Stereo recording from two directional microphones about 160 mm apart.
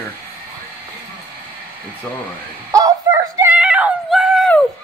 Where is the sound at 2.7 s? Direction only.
20° right (ahead or behind).